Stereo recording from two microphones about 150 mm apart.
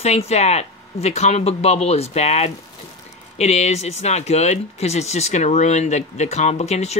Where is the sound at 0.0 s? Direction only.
45° left (ahead or behind).